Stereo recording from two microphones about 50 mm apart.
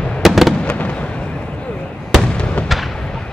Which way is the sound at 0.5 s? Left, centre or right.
Left.